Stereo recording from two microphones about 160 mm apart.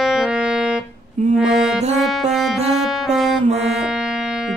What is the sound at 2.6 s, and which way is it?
Music, 40° right (ahead or behind).